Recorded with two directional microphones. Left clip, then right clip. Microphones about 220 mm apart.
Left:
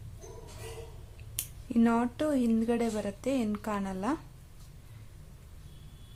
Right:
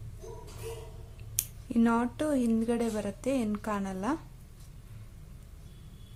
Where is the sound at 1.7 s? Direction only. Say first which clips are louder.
Even; centre (ahead or behind).